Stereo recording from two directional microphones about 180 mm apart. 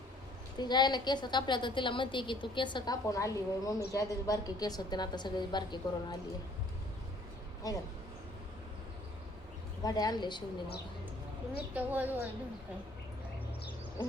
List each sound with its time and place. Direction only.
0.6 s a woman's voice: 25° left (ahead or behind)
7.6 s a woman's voice: 20° left (ahead or behind)
9.8 s a woman's voice: 20° left (ahead or behind)
11.5 s a woman's voice: 10° right (ahead or behind)